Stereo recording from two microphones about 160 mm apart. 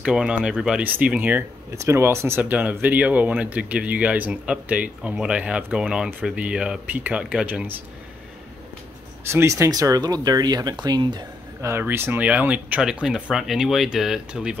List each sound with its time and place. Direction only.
0.0 s speech: 5° right (ahead or behind)
9.3 s speech: 15° right (ahead or behind)
11.6 s speech: 15° right (ahead or behind)